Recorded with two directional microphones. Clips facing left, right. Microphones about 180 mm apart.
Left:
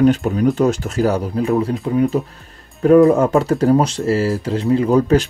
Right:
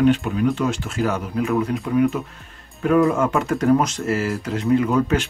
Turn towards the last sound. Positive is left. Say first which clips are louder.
# left 4 dB
turn(degrees=35)  # may be behind; listen again after turning